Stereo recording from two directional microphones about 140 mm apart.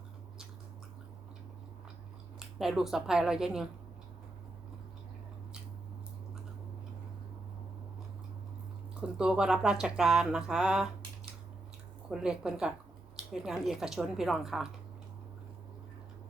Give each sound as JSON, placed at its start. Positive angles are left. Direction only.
{"t": 2.4, "sound": "speech", "side_deg": -5}
{"t": 9.0, "sound": "speech", "side_deg": -5}
{"t": 12.1, "sound": "speech", "side_deg": -5}